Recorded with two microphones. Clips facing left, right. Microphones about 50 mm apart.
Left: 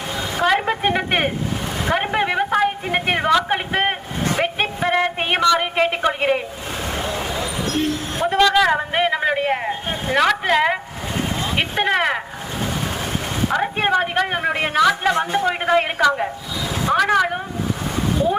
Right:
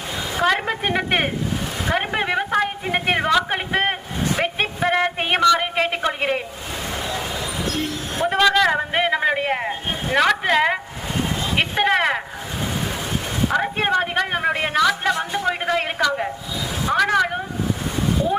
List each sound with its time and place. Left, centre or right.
0.4 s a woman's voice: centre
1.9 s a sound: centre
7.0 s vehicle: left
8.2 s a sound: centre
10.2 s speech: centre
13.5 s a man's voice: centre